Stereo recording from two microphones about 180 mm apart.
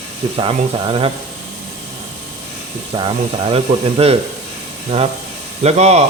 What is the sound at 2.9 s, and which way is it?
Speech, 25° right (ahead or behind).